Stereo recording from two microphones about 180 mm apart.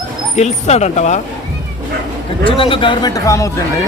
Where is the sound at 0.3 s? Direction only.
40° left (ahead or behind).